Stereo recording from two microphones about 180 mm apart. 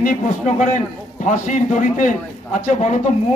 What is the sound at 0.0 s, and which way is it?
A man's voice, 45° left (ahead or behind).